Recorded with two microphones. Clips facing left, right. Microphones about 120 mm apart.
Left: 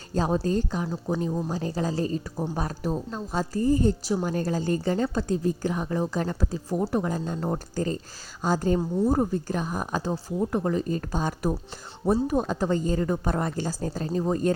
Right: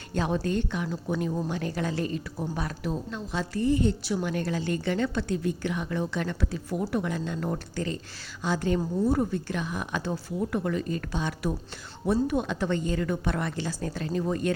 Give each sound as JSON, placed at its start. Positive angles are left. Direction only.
{"t": 0.1, "sound": "a woman's voice", "side_deg": 35}